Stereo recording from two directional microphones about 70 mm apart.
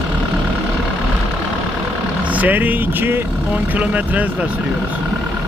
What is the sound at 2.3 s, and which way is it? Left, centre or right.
Speech, right.